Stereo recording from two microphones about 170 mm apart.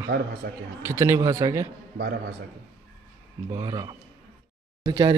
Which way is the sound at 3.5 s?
25° right (ahead or behind).